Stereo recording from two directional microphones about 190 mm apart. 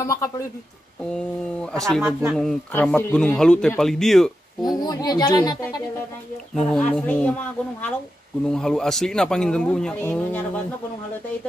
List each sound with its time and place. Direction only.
0.0 s speech: 15° left (ahead or behind)
1.7 s speech: centre (ahead or behind)
4.6 s speech: 20° left (ahead or behind)
6.5 s speech: 5° left (ahead or behind)